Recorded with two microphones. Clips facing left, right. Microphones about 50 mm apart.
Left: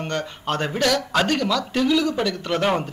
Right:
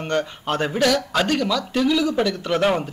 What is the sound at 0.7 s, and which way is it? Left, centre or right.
A man's voice, centre.